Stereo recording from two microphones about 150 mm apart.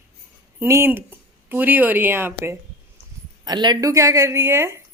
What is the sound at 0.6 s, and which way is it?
Speech, 15° right (ahead or behind).